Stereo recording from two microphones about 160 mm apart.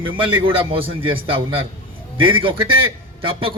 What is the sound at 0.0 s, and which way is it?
A man's voice, 30° right (ahead or behind).